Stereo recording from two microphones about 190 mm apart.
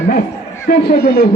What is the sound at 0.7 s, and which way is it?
Speech, 55° left (ahead or behind).